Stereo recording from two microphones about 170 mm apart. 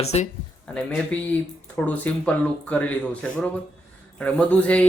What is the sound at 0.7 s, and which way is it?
Speech, 5° left (ahead or behind).